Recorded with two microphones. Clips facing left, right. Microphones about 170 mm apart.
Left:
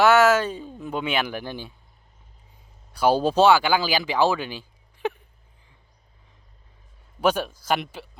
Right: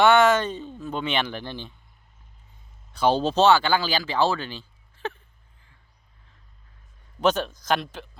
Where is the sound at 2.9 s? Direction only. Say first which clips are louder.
Left 2 dB; 10° left (ahead or behind).